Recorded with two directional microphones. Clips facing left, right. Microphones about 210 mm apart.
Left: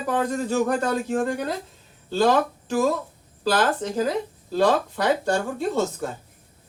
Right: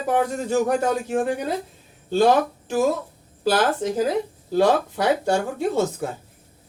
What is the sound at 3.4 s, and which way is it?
A man's voice, 10° right (ahead or behind).